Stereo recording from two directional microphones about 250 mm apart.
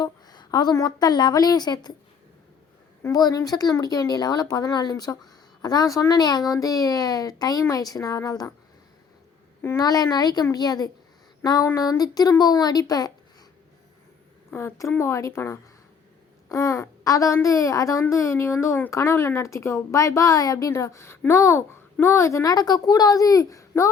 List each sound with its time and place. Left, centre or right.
0.0 s a woman's voice: centre
3.0 s a woman's voice: centre
9.6 s a woman's voice: centre
14.5 s a woman's voice: centre